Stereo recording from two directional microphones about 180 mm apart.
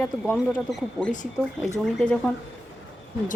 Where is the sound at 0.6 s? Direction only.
Centre (ahead or behind).